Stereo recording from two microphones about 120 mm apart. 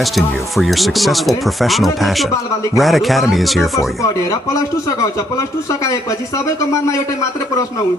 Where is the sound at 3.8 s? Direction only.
25° left (ahead or behind).